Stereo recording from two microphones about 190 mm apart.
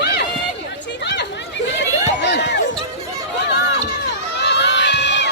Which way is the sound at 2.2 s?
65° left (ahead or behind).